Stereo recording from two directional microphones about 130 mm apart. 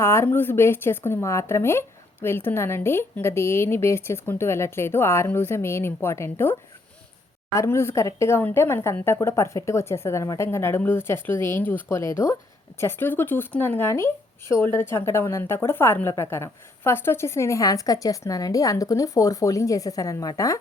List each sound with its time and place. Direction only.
0.0 s a woman's voice: 20° left (ahead or behind)